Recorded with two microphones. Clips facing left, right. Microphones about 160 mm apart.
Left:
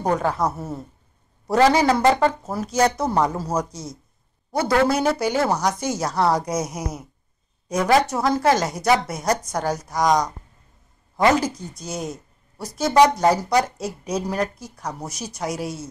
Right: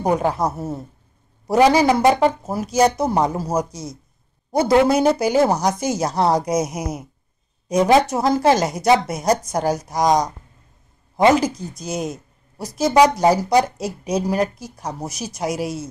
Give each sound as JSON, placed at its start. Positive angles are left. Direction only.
{"t": 0.0, "sound": "speech", "side_deg": -15}
{"t": 11.1, "sound": "speech", "side_deg": -15}